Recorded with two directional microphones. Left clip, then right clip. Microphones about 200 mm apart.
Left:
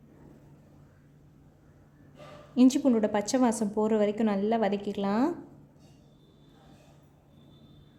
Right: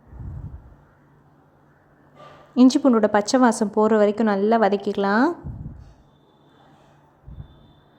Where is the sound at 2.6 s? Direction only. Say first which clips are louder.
Right 7 dB; 15° right (ahead or behind).